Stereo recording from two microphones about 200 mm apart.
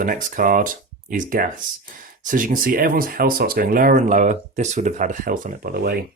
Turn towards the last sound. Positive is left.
turn(degrees=-50)  # may be behind; listen again after turning